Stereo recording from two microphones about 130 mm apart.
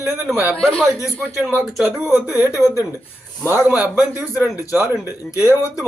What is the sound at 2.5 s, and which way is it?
Speech, 25° left (ahead or behind).